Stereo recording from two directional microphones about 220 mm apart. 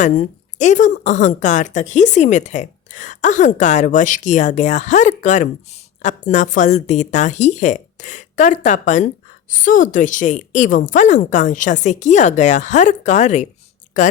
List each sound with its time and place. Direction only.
0.0 s a woman's voice: 35° left (ahead or behind)